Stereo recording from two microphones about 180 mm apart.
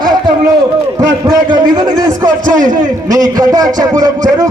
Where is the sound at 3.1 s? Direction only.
20° right (ahead or behind).